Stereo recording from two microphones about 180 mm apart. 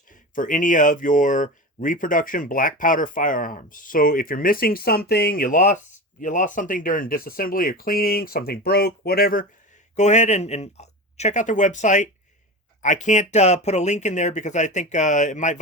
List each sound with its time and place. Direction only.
0.1 s speech: 45° left (ahead or behind)
9.9 s speech: 40° left (ahead or behind)